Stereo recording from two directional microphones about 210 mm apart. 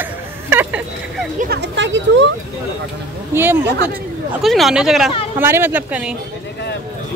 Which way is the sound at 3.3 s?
10° right (ahead or behind).